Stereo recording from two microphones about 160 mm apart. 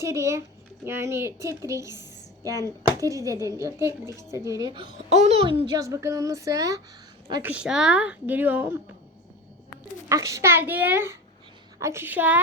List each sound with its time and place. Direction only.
0.0 s a woman's voice: 20° right (ahead or behind)
5.0 s a child's voice: 45° right (ahead or behind)
5.7 s a woman's voice: 20° right (ahead or behind)
7.4 s a woman's voice: 5° right (ahead or behind)
10.1 s a woman's voice: 20° right (ahead or behind)